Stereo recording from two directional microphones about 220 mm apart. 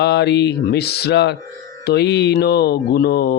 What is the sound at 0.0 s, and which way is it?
Mantra, 50° left (ahead or behind).